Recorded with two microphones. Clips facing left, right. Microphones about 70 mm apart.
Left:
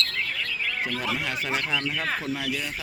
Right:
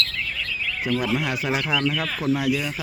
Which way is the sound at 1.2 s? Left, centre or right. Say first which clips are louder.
Right 4 dB; centre.